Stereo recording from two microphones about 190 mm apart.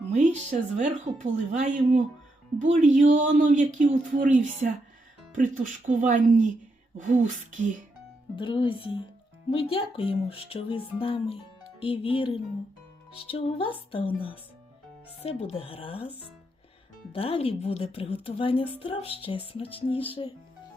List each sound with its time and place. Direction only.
0.1 s speech: 40° right (ahead or behind)
8.4 s speech: 25° left (ahead or behind)
15.2 s speech: 35° left (ahead or behind)